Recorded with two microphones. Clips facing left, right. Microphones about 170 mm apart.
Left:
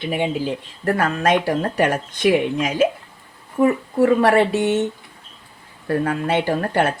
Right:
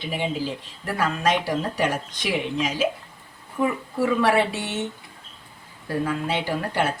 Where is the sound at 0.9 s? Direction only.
55° left (ahead or behind).